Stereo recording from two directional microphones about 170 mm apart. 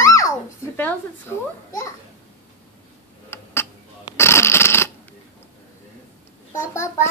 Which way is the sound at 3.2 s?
15° left (ahead or behind).